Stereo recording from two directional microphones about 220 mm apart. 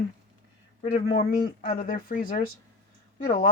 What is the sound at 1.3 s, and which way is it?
Speech, 40° left (ahead or behind).